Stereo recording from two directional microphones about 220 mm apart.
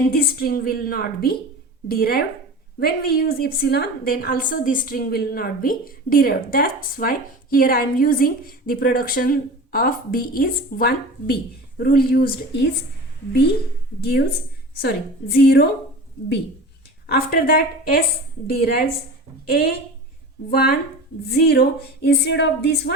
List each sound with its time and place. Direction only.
0.1 s a woman's voice: 45° left (ahead or behind)
14.0 s speech: 45° left (ahead or behind)
15.4 s speech: 45° left (ahead or behind)
17.1 s speech: 45° left (ahead or behind)